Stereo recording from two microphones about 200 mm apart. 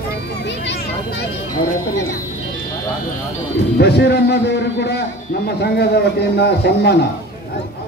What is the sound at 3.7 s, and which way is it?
A man's voice, 55° left (ahead or behind).